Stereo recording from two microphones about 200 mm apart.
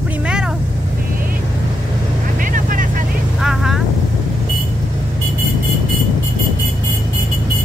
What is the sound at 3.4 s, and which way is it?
Vehicle, centre (ahead or behind).